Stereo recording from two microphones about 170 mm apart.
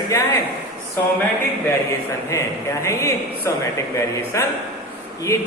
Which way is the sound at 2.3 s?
15° left (ahead or behind).